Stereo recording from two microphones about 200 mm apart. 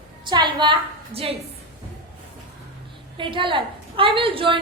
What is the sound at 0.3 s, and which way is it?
A woman's voice, 20° right (ahead or behind).